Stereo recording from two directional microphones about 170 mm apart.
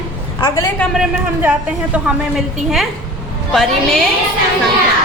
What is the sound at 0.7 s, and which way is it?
A woman's voice, centre (ahead or behind).